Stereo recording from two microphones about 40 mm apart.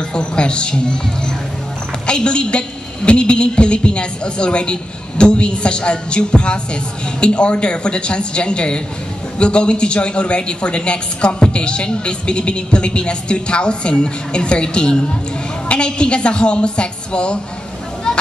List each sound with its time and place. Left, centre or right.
0.1 s a woman's voice: left